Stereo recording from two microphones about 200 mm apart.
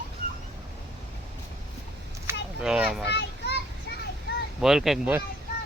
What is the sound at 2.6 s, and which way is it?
Speech, 5° right (ahead or behind).